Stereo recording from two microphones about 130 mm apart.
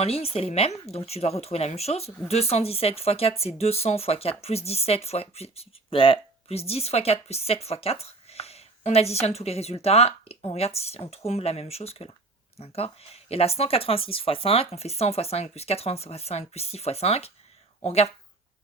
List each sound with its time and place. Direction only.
0.0 s speech: 50° left (ahead or behind)